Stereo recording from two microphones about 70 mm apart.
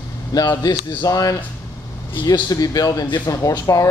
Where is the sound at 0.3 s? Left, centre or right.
Left.